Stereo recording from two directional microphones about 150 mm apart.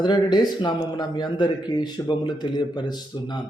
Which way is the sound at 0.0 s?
30° left (ahead or behind).